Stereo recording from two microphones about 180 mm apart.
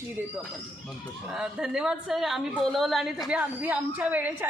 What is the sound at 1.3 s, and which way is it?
A woman's voice, 5° right (ahead or behind).